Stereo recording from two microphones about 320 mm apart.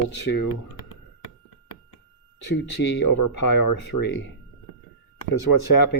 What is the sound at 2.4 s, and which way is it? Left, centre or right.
Speech, left.